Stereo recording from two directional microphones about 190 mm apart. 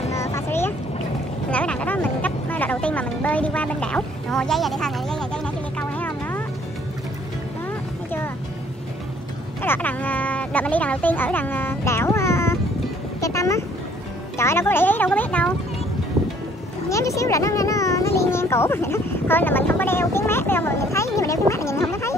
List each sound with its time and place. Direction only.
0.2 s vehicle: 15° left (ahead or behind)
1.5 s music: 5° left (ahead or behind)
9.6 s speech: 10° left (ahead or behind)
13.2 s vehicle: 15° left (ahead or behind)
14.4 s speech: 15° left (ahead or behind)
16.9 s a sound: 15° left (ahead or behind)